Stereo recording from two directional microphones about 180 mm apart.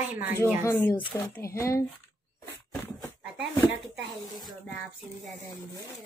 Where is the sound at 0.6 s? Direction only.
10° left (ahead or behind).